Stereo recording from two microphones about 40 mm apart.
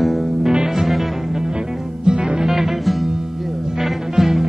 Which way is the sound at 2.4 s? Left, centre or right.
Centre.